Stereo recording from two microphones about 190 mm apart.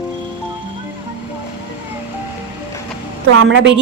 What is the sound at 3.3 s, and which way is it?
Speech, 85° right.